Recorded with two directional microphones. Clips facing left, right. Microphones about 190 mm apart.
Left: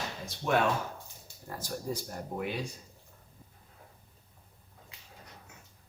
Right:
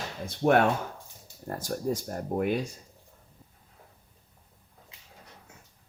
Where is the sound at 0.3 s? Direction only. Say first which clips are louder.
Right 6 dB; 55° right (ahead or behind).